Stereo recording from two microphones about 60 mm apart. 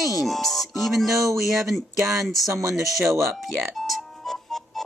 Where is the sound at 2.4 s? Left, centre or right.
Right.